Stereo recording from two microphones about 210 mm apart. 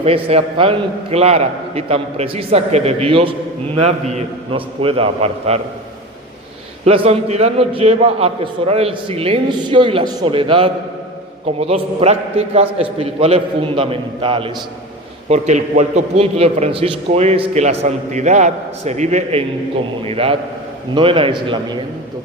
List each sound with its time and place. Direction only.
0.0 s a man's voice: 30° right (ahead or behind)
6.8 s a man's voice: 30° right (ahead or behind)